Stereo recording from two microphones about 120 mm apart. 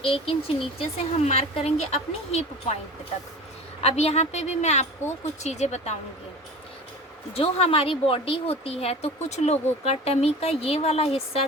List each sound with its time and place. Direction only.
0.0 s speech: 50° left (ahead or behind)
3.8 s a woman's voice: 65° left (ahead or behind)
7.3 s speech: 55° left (ahead or behind)